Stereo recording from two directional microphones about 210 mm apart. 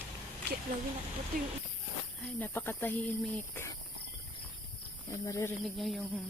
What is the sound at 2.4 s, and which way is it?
Speech, 10° left (ahead or behind).